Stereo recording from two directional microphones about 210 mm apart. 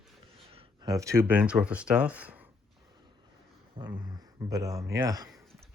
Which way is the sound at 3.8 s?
25° right (ahead or behind).